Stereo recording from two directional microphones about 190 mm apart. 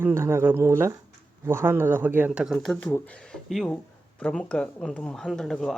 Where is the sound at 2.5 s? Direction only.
5° left (ahead or behind).